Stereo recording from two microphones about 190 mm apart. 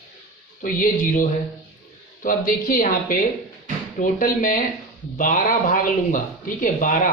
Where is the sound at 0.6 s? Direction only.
45° left (ahead or behind).